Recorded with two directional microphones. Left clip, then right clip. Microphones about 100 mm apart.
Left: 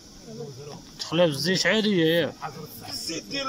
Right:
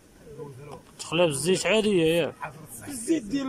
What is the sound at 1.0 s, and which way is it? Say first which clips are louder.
Speech: left 1 dB; 5° right (ahead or behind).